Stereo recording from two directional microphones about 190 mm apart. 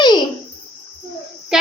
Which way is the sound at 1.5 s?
5° right (ahead or behind).